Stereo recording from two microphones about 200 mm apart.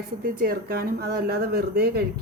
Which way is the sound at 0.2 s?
50° right (ahead or behind).